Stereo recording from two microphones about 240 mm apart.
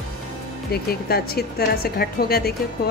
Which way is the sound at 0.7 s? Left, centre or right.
Left.